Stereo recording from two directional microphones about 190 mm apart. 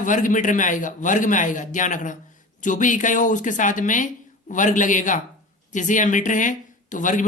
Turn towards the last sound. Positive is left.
turn(degrees=45)  # may be behind; listen again after turning